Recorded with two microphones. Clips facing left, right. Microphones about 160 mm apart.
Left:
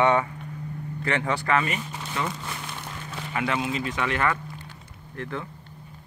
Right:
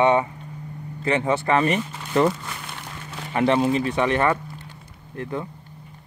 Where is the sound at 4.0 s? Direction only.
25° right (ahead or behind).